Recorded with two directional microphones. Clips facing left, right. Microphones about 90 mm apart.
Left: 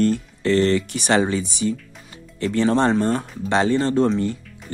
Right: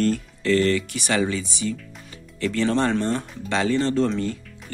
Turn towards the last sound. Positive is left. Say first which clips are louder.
# left 3 dB
turn(degrees=20)  # may be behind; listen again after turning